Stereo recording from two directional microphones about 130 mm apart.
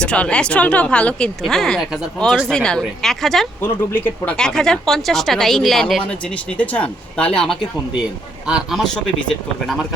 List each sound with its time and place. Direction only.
0.0 s speech: 10° left (ahead or behind)
3.6 s speech: 15° left (ahead or behind)
4.4 s a man's voice: 5° left (ahead or behind)